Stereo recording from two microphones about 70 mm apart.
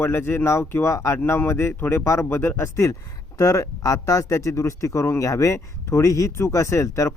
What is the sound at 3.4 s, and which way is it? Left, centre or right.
Speech, left.